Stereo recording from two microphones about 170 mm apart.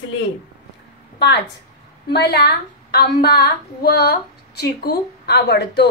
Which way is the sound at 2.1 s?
75° left (ahead or behind).